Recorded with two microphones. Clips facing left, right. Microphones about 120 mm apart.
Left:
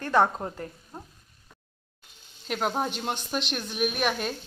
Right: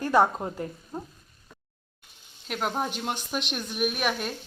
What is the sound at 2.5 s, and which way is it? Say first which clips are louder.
A woman's voice: left 1 dB; centre (ahead or behind).